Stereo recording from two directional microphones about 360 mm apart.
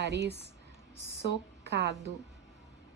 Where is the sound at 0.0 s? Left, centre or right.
Right.